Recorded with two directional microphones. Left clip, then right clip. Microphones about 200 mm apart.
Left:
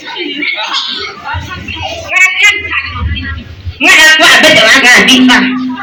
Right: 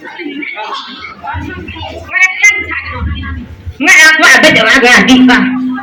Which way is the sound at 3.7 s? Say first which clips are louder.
Left 1 dB; 55° right (ahead or behind).